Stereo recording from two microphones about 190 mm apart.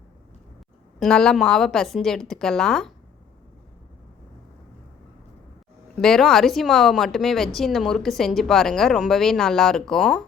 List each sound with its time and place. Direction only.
0.9 s speech: 5° left (ahead or behind)
6.0 s speech: centre (ahead or behind)